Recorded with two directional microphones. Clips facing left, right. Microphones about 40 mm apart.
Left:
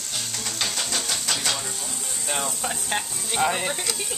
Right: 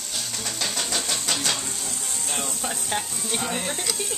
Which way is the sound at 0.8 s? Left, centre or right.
Centre.